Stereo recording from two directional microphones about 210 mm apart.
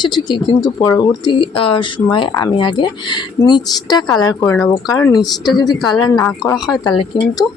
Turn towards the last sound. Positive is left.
turn(degrees=20)  # may be behind; listen again after turning